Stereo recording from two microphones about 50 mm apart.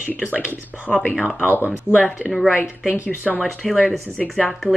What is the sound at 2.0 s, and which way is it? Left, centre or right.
Speech, centre.